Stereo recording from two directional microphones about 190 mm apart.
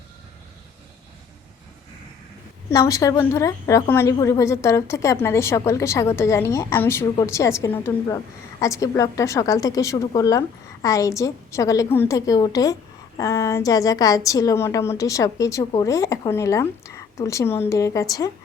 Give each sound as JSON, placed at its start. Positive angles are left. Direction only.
{"t": 2.6, "sound": "a woman's voice", "side_deg": 15}